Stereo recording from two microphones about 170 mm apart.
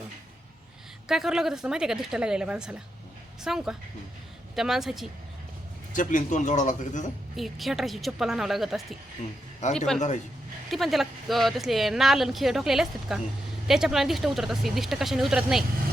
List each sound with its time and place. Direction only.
1.0 s speech: 5° right (ahead or behind)
5.9 s a man's voice: 50° left (ahead or behind)
7.3 s speech: centre (ahead or behind)